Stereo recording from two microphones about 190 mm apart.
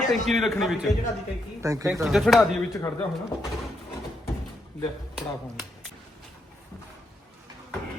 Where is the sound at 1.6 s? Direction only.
15° right (ahead or behind).